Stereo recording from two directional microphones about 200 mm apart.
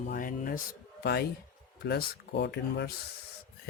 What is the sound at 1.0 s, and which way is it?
Speech, 55° left (ahead or behind).